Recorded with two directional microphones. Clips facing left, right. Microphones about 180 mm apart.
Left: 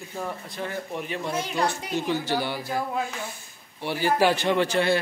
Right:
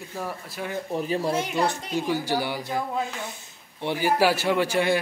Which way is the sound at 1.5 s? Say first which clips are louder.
Right 1 dB; 15° right (ahead or behind).